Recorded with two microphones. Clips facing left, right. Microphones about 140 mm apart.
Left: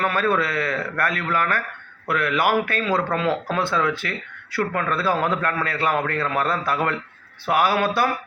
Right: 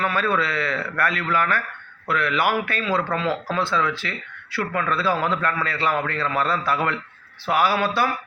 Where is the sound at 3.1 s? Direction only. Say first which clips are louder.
Left 1 dB; 55° left (ahead or behind).